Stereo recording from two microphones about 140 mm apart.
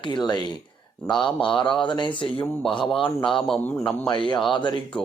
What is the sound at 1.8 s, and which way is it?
Speech, 35° left (ahead or behind).